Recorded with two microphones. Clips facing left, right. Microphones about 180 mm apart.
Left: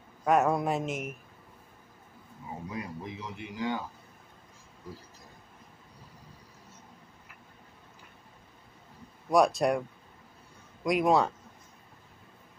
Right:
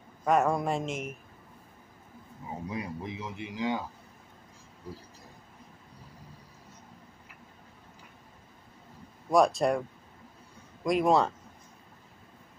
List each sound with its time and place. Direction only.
0.2 s speech: 5° left (ahead or behind)
2.7 s a man's voice: 20° right (ahead or behind)
9.3 s speech: centre (ahead or behind)